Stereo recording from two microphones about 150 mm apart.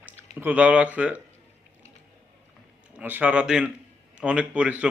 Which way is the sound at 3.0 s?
10° right (ahead or behind).